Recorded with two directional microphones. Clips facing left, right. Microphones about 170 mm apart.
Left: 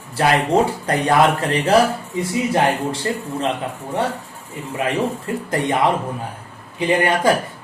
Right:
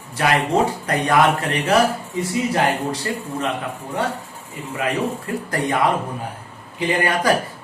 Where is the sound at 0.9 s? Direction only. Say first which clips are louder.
Even; 30° left (ahead or behind).